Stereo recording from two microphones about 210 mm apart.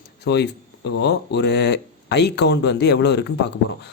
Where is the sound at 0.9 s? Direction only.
55° left (ahead or behind).